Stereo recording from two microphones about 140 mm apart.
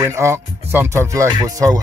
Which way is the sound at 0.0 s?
20° right (ahead or behind).